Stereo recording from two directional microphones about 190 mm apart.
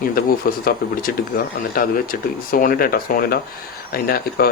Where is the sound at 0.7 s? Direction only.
50° left (ahead or behind).